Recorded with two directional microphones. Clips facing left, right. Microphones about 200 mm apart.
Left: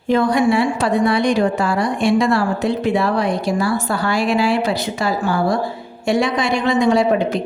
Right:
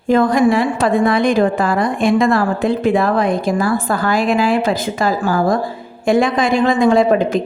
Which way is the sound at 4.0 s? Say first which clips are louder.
Right 2 dB; 90° right.